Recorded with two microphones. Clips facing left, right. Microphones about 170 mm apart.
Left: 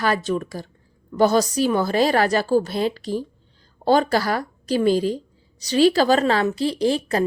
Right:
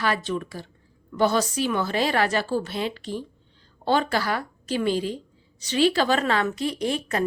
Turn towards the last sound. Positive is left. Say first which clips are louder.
# left 6 dB
turn(degrees=35)  # may be behind; listen again after turning